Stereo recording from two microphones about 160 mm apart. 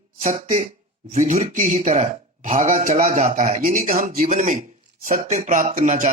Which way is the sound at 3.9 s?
65° right (ahead or behind).